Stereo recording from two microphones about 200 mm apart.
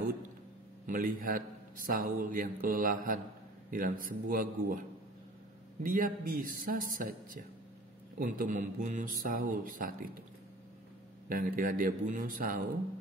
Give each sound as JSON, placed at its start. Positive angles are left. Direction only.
{"t": 0.8, "sound": "a man's voice", "side_deg": -45}
{"t": 5.8, "sound": "a man's voice", "side_deg": -45}
{"t": 11.2, "sound": "a man's voice", "side_deg": -45}